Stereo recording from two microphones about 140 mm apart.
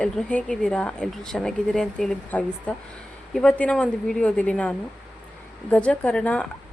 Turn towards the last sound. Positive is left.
turn(degrees=10)  # may be behind; listen again after turning